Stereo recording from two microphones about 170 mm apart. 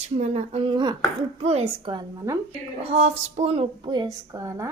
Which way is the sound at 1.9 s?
25° right (ahead or behind).